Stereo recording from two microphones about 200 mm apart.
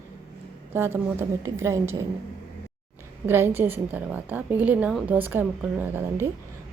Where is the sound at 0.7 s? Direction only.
10° right (ahead or behind).